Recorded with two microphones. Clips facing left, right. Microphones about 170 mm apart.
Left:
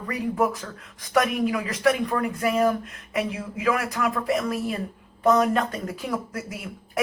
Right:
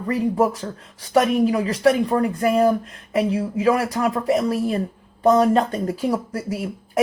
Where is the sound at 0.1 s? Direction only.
35° right (ahead or behind).